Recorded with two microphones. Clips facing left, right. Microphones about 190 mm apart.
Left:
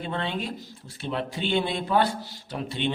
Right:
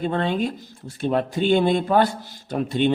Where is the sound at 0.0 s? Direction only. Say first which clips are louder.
Right 8 dB; 45° right (ahead or behind).